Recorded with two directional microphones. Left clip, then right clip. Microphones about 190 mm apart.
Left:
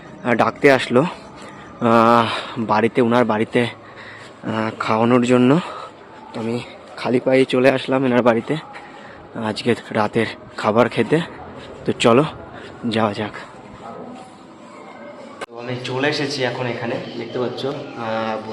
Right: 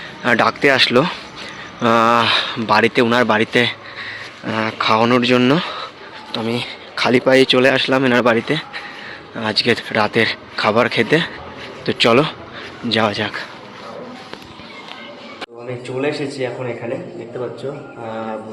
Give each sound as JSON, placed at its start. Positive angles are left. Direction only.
{"t": 0.2, "sound": "speech", "side_deg": 5}
{"t": 6.3, "sound": "speech", "side_deg": 0}
{"t": 15.6, "sound": "speech", "side_deg": -5}
{"t": 18.0, "sound": "speech", "side_deg": 0}